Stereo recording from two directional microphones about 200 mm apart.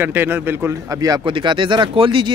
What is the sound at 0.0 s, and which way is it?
Speech, 10° right (ahead or behind).